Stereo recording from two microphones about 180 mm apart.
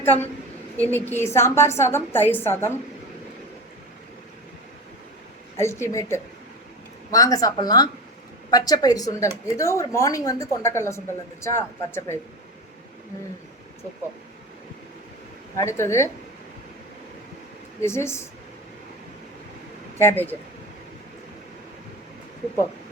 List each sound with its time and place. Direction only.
0.0 s a woman's voice: 10° left (ahead or behind)
5.5 s a woman's voice: 15° left (ahead or behind)
15.5 s a woman's voice: 15° left (ahead or behind)
17.7 s a woman's voice: 15° left (ahead or behind)
20.0 s a woman's voice: 10° left (ahead or behind)